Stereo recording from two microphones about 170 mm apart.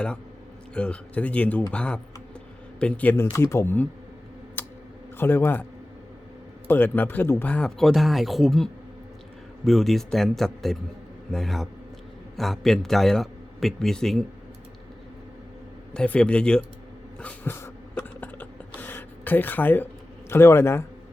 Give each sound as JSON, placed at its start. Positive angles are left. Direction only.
{"t": 0.7, "sound": "speech", "side_deg": 5}
{"t": 4.6, "sound": "a sound", "side_deg": 10}
{"t": 5.1, "sound": "speech", "side_deg": 10}
{"t": 6.7, "sound": "speech", "side_deg": 10}
{"t": 15.9, "sound": "speech", "side_deg": 5}
{"t": 17.2, "sound": "a sound", "side_deg": 10}
{"t": 20.3, "sound": "speech", "side_deg": 15}